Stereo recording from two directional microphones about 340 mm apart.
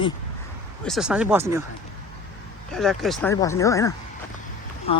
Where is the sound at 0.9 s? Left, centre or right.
Centre.